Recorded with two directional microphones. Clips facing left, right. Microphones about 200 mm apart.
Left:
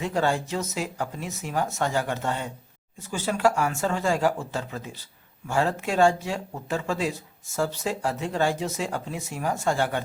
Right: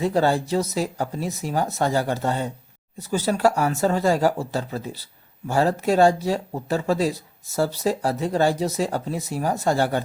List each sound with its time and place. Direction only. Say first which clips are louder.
0.0 s speech: right 5 dB; 35° right (ahead or behind)